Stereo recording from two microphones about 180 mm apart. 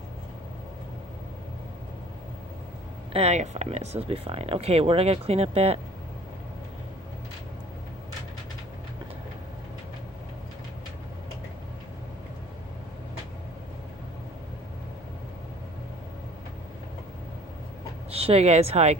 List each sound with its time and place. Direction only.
3.1 s speech: 35° right (ahead or behind)
18.1 s speech: 35° right (ahead or behind)